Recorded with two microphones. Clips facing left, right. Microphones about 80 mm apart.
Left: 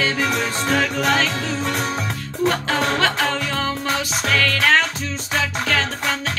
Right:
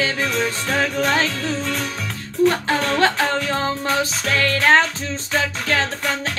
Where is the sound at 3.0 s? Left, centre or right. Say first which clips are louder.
Right 2 dB; right.